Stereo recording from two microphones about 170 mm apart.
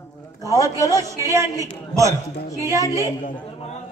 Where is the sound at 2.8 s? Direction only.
20° left (ahead or behind).